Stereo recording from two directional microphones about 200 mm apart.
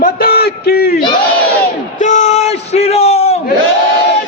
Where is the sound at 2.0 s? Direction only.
35° left (ahead or behind).